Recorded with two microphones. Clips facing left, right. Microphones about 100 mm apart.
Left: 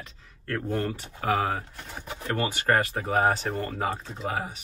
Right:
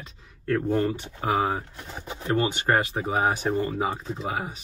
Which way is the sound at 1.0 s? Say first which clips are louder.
Right 1 dB; 20° right (ahead or behind).